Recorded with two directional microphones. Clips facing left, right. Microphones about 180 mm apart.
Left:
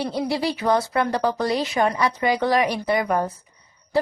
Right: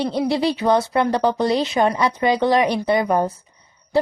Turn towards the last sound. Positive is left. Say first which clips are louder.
# right 3 dB
turn(degrees=-25)  # may be behind; listen again after turning